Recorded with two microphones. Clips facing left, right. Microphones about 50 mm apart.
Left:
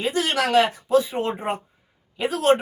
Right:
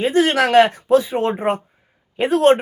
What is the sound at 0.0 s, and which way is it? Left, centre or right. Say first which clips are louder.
Speech: right 7 dB; right.